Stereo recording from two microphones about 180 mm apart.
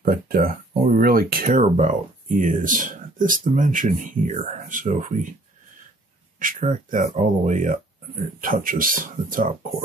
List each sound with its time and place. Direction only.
0.0 s speech: 55° right (ahead or behind); by 5.2 s 40° right (ahead or behind)
6.4 s speech: 45° right (ahead or behind)